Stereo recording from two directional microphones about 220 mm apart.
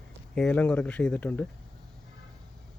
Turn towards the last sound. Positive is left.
turn(degrees=5)  # may be behind; listen again after turning